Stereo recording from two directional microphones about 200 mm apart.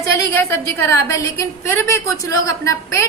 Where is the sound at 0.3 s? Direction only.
15° left (ahead or behind).